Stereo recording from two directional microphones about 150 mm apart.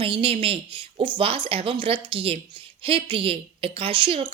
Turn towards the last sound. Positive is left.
turn(degrees=-35)  # may be behind; listen again after turning